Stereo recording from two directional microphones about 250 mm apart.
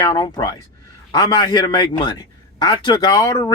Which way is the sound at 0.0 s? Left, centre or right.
Centre.